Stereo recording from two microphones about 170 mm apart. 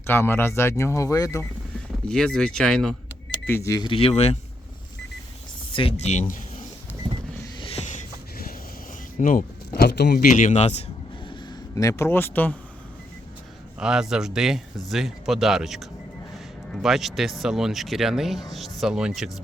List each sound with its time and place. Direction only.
0.1 s speech: 15° left (ahead or behind)
2.0 s speech: 5° left (ahead or behind)
3.4 s speech: 15° left (ahead or behind); by 4.4 s 40° left (ahead or behind)
5.7 s speech: 35° left (ahead or behind)
7.4 s a sound: 35° left (ahead or behind)
9.1 s speech: 55° left (ahead or behind); by 10.2 s 75° left (ahead or behind)
10.2 s speech: 50° left (ahead or behind)
11.7 s speech: 20° left (ahead or behind)
13.7 s speech: 5° right (ahead or behind)